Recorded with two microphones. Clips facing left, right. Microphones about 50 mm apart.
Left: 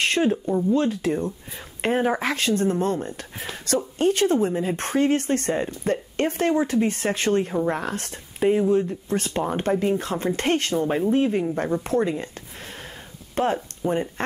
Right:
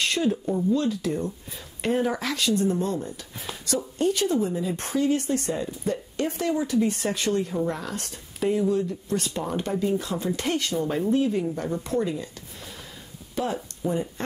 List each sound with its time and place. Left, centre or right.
0.0 s a sound: left
0.7 s speech: left
11.8 s speech: left